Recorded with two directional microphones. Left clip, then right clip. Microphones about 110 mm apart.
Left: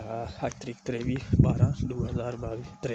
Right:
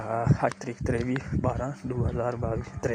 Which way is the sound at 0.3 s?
Centre (ahead or behind).